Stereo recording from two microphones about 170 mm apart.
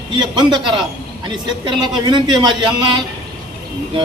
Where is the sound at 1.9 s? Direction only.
25° right (ahead or behind).